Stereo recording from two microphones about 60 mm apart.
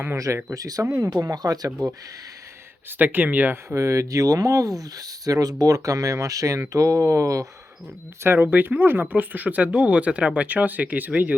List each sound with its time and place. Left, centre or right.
0.5 s speech: right
3.0 s speech: right
3.7 s speech: right
8.2 s speech: right